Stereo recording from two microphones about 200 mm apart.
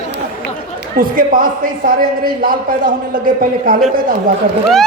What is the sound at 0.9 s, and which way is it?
A man's voice, 45° right (ahead or behind).